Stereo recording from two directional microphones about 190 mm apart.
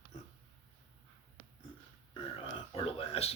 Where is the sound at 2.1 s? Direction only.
30° left (ahead or behind).